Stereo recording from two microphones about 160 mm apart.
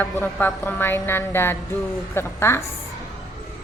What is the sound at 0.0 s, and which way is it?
Speech, 10° left (ahead or behind).